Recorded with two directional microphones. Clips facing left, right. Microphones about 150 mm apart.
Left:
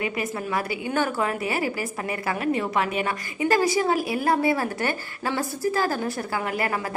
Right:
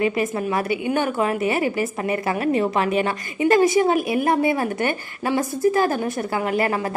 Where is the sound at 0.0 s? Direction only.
25° right (ahead or behind).